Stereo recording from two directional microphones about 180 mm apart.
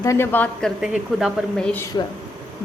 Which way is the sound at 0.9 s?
5° right (ahead or behind).